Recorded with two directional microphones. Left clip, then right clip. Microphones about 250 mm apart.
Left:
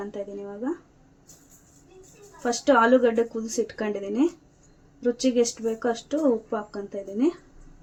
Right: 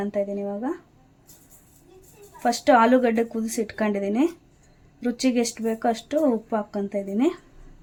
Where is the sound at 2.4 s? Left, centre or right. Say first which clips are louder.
Right 2 dB; right.